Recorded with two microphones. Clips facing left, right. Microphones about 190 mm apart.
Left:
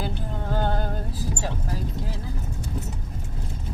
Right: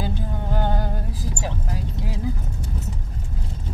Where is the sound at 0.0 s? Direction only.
15° right (ahead or behind).